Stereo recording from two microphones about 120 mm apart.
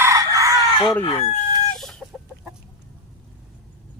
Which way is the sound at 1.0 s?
50° left (ahead or behind).